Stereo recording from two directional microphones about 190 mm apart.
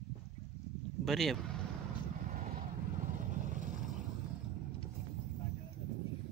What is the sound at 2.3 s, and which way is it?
Vehicle, 45° right (ahead or behind).